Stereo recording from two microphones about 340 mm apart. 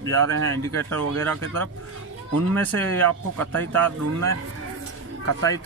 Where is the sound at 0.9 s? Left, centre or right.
Centre.